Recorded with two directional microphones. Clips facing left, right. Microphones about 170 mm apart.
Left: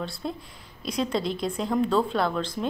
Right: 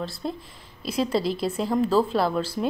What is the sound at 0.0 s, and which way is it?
A woman's voice, centre (ahead or behind).